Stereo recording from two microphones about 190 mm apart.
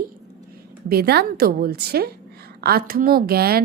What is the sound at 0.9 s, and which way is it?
A woman's voice, 55° right (ahead or behind).